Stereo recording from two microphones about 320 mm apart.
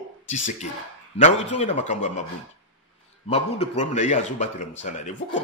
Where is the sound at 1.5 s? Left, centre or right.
Left.